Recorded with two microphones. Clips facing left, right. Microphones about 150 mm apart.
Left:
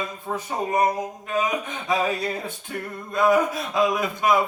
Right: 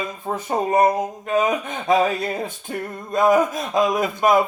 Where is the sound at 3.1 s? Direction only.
45° right (ahead or behind).